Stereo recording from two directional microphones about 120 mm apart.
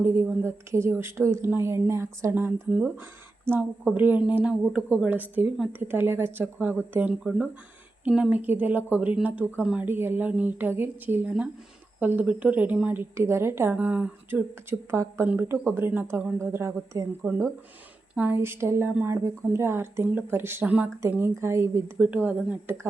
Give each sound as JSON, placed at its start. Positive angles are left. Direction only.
{"t": 0.0, "sound": "a woman's voice", "side_deg": -15}